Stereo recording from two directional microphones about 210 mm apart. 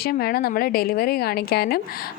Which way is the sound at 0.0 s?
45° left (ahead or behind).